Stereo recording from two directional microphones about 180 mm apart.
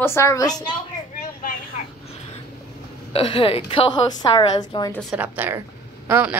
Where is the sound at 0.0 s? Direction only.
15° left (ahead or behind).